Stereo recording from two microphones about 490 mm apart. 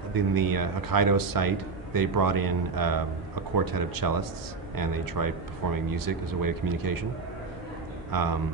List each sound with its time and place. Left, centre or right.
0.1 s speech: right
8.1 s speech: right